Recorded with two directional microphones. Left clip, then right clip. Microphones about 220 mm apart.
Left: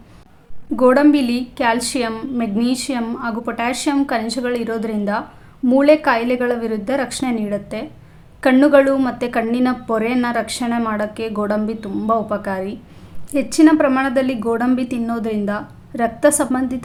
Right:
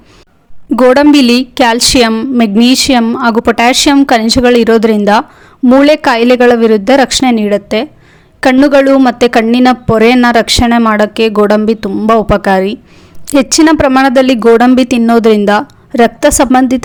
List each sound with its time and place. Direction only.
0.8 s a woman's voice: 45° right (ahead or behind)